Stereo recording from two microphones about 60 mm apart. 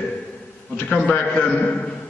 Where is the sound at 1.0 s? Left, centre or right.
Left.